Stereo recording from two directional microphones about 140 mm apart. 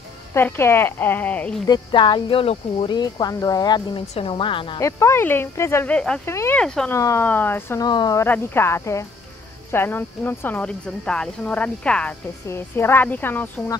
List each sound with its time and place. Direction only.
0.3 s speech: 15° left (ahead or behind)
1.7 s speech: 35° left (ahead or behind)
2.9 s speech: 30° left (ahead or behind)
4.1 s speech: 40° left (ahead or behind)
4.7 s speech: 20° left (ahead or behind)
6.2 s speech: 20° left (ahead or behind)
6.6 s speech: 5° left (ahead or behind)
6.9 s speech: 20° left (ahead or behind)
7.8 s speech: 30° left (ahead or behind)
8.2 s speech: 15° left (ahead or behind)